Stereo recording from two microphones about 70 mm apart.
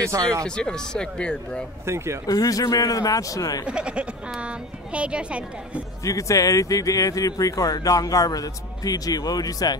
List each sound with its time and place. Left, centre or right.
0.1 s speech: right
0.6 s speech: centre
2.2 s speech: left
3.6 s speech: centre
6.0 s speech: left